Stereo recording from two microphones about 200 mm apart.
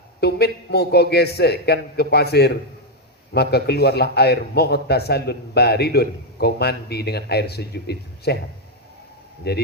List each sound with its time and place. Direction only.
0.2 s a man's voice: 55° left (ahead or behind)
9.5 s a man's voice: 55° left (ahead or behind)